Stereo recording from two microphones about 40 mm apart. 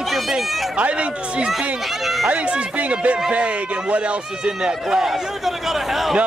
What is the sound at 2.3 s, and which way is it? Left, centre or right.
Speech, right.